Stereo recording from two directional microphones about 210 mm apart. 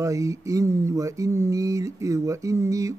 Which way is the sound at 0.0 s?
15° right (ahead or behind).